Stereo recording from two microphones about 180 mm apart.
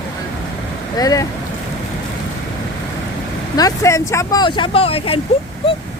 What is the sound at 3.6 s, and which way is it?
Speech, 20° left (ahead or behind).